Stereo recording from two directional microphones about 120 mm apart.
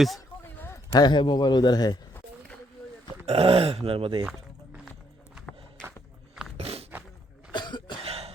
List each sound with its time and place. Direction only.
0.9 s a man's voice: 40° left (ahead or behind)
3.2 s a man's voice: 55° right (ahead or behind)
6.6 s a sound: 55° right (ahead or behind)
7.5 s cough: 40° left (ahead or behind)
8.0 s cough: 55° right (ahead or behind)